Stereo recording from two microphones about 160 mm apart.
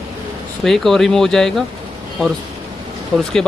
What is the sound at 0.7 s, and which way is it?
Speech, centre (ahead or behind).